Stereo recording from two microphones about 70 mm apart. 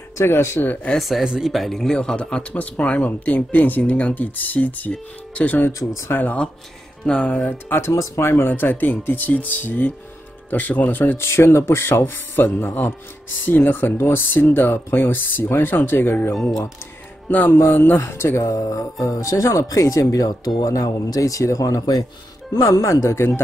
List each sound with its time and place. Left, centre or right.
0.2 s speech: left
0.9 s a man's voice: centre; by 5.7 s left
5.7 s speech: left
6.0 s a man's voice: left
7.7 s a man's voice: left
17.3 s a man's voice: left
18.4 s speech: left
22.6 s speech: left